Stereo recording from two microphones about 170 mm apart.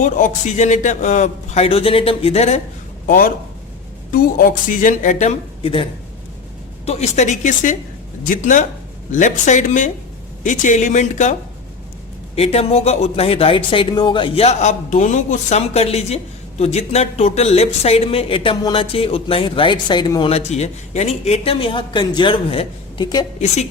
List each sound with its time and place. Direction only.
0.0 s a man's voice: 45° left (ahead or behind)
3.1 s speech: 55° left (ahead or behind)
12.4 s a man's voice: 35° left (ahead or behind)